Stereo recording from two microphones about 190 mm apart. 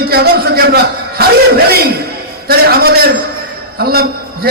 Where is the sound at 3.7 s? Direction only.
55° right (ahead or behind).